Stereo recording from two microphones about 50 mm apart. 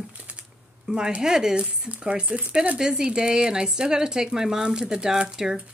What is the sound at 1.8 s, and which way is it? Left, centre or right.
Speech, right.